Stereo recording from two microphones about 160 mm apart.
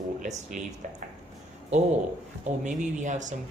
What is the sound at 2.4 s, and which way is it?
Speech, 50° right (ahead or behind).